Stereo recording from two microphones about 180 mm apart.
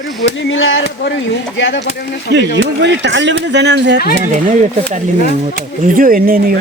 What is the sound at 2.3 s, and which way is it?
Speech, 75° right (ahead or behind).